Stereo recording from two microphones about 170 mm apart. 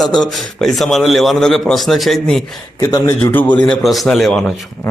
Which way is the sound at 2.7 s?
20° left (ahead or behind).